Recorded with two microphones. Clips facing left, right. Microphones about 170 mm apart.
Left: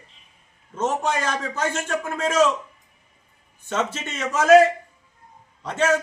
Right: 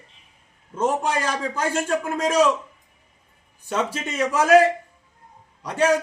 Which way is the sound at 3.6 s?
10° right (ahead or behind).